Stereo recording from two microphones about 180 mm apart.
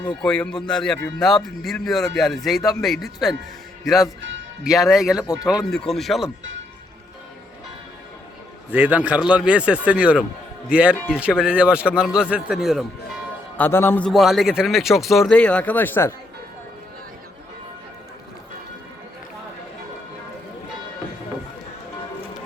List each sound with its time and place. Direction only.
0.0 s speech: 5° left (ahead or behind)
8.7 s a man's voice: 10° right (ahead or behind)
13.6 s a man's voice: 15° left (ahead or behind)
14.1 s speech: centre (ahead or behind)